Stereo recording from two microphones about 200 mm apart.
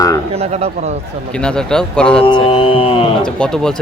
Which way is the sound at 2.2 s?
25° left (ahead or behind).